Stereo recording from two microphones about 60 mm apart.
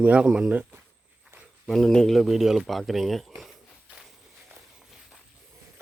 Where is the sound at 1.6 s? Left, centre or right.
Centre.